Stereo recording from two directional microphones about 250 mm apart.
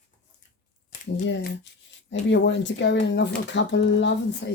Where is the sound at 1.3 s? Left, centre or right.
Left.